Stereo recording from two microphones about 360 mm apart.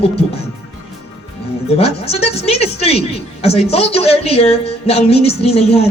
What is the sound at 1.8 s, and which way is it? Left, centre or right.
A woman's voice, centre.